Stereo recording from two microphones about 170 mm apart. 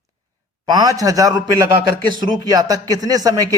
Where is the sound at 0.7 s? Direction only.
25° right (ahead or behind).